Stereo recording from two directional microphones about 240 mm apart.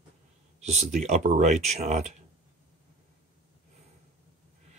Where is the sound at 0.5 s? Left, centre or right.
Right.